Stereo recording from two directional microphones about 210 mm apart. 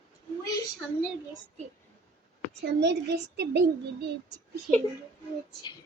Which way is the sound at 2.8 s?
55° right (ahead or behind).